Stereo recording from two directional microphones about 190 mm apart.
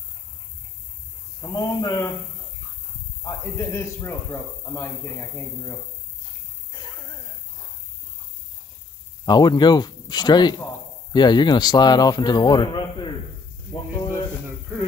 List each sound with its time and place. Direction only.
1.4 s a man's voice: 20° left (ahead or behind)
3.3 s a man's voice: 15° left (ahead or behind)
9.2 s a man's voice: 20° left (ahead or behind)